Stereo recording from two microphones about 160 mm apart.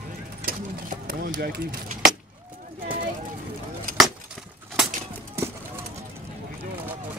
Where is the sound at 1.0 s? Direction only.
75° right (ahead or behind).